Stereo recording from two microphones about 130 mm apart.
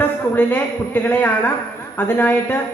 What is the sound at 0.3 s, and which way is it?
Speech, 15° left (ahead or behind).